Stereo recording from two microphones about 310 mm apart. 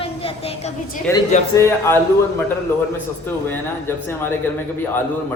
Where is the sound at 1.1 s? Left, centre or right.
Centre.